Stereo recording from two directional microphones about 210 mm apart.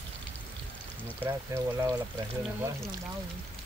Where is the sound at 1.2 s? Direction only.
10° right (ahead or behind).